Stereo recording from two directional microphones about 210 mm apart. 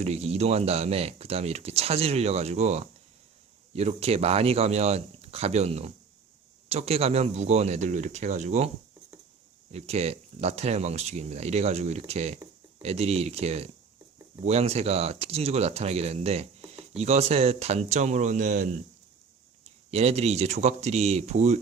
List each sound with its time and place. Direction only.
0.0 s speech: 30° right (ahead or behind)
9.7 s speech: 30° right (ahead or behind)
19.9 s speech: 30° right (ahead or behind)